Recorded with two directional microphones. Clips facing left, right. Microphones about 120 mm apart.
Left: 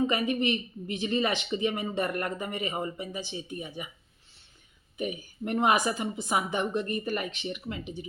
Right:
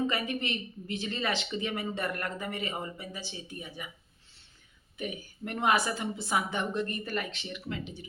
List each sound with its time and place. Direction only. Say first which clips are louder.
0.1 s speech: left 6 dB; 20° left (ahead or behind)
4.9 s a woman's voice: left 4 dB; 15° left (ahead or behind)